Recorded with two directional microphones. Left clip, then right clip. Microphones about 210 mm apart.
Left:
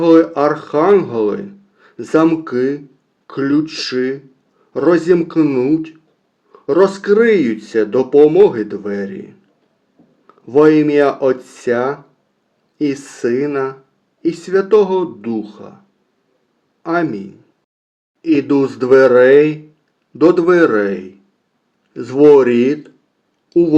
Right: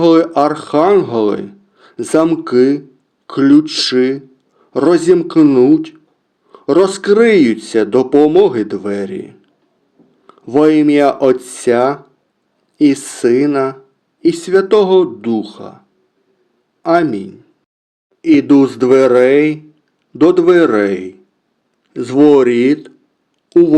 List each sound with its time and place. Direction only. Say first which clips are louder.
0.0 s speech: right 1 dB; 35° right (ahead or behind)
16.8 s speech: right 5 dB; 35° right (ahead or behind)